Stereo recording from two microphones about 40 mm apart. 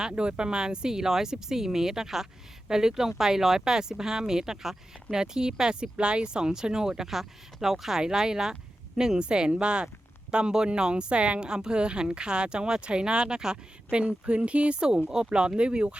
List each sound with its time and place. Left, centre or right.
0.2 s speech: right
14.8 s speech: centre